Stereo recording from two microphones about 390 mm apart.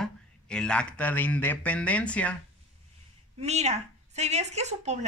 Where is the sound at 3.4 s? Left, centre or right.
Centre.